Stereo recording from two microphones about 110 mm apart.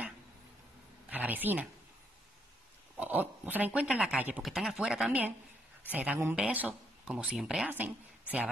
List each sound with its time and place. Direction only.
1.1 s speech: 15° right (ahead or behind)
3.0 s a woman's voice: 15° right (ahead or behind)